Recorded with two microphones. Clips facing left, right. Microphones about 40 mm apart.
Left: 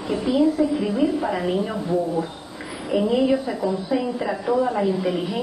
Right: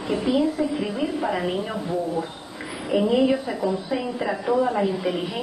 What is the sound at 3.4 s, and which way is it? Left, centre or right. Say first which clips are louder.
A woman's voice: left 1 dB; centre.